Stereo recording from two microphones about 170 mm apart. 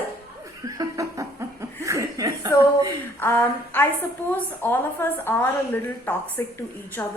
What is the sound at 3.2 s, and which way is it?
A woman's voice, 15° left (ahead or behind).